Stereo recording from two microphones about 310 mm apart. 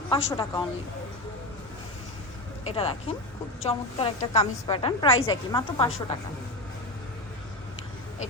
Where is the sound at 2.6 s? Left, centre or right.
Centre.